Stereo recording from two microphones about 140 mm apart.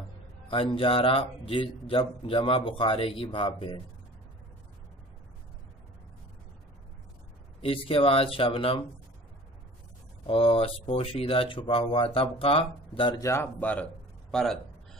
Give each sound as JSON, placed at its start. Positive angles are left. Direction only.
{"t": 0.5, "sound": "speech", "side_deg": 40}
{"t": 7.6, "sound": "speech", "side_deg": 40}
{"t": 10.2, "sound": "speech", "side_deg": 40}
{"t": 13.2, "sound": "speech", "side_deg": 15}